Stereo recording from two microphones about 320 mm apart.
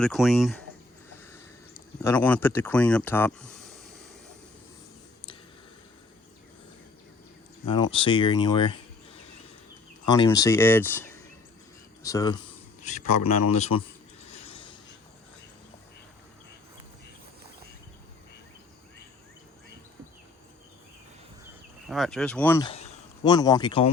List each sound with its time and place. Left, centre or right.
0.0 s speech: centre
2.0 s speech: centre
7.7 s speech: centre
10.1 s speech: centre
12.8 s a man's voice: left
13.7 s speech: left
14.3 s a sound: centre
21.8 s speech: centre